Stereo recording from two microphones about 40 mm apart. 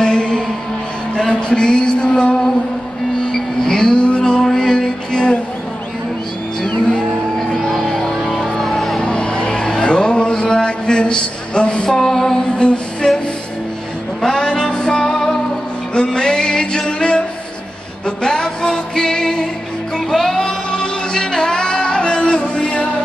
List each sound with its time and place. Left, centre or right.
0.0 s music: centre
1.1 s a sound: centre
3.2 s music: centre
7.7 s music: centre
9.0 s music: left
12.5 s a sound: left
13.0 s music: left
14.2 s music: centre
15.9 s music: left
20.3 s music: centre